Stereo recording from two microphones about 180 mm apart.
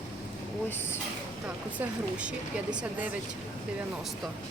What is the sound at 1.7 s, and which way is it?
A woman's voice, 5° right (ahead or behind).